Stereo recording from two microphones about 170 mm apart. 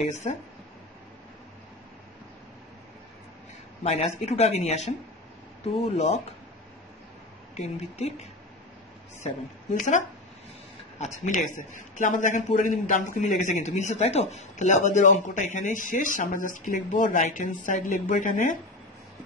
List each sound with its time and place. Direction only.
0.0 s speech: 40° left (ahead or behind)
3.8 s speech: 40° left (ahead or behind)
7.5 s speech: 40° left (ahead or behind)
9.8 s a man's voice: 45° left (ahead or behind)